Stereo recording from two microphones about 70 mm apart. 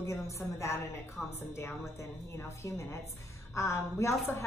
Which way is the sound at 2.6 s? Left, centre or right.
Left.